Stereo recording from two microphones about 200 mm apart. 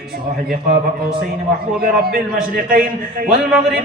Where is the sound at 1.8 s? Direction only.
50° right (ahead or behind).